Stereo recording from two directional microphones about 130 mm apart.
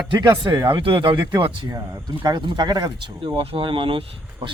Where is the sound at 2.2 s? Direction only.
30° right (ahead or behind).